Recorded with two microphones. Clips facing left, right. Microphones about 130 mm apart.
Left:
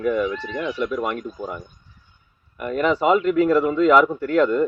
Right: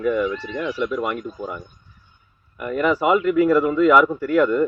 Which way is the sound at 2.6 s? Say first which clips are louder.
Even; 25° left (ahead or behind).